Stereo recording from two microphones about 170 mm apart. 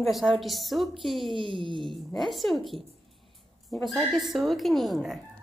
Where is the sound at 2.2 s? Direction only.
Centre (ahead or behind).